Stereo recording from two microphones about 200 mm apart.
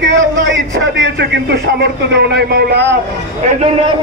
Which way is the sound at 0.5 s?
65° right (ahead or behind).